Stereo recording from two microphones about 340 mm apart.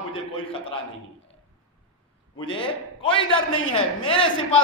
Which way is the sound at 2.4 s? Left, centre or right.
Centre.